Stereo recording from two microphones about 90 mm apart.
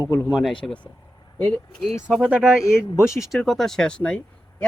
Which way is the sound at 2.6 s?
30° left (ahead or behind).